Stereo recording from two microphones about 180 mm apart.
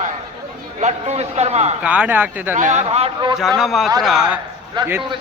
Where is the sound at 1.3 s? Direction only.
35° right (ahead or behind).